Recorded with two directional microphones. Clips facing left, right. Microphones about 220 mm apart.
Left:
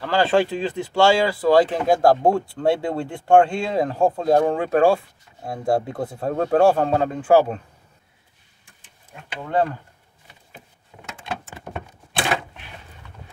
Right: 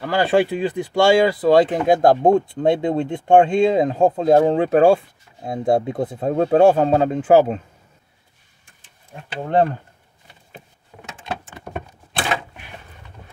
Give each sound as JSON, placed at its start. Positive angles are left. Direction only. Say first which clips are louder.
{"t": 0.0, "sound": "speech", "louder": "right 1 dB", "side_deg": -15}
{"t": 9.4, "sound": "speech", "louder": "right 4 dB", "side_deg": -40}